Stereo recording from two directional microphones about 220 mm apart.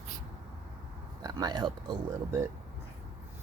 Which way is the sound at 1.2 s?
20° right (ahead or behind).